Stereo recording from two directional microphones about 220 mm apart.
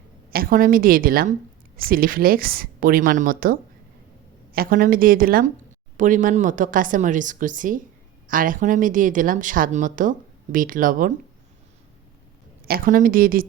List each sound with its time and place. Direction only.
0.3 s speech: 40° right (ahead or behind)
12.6 s speech: 40° right (ahead or behind)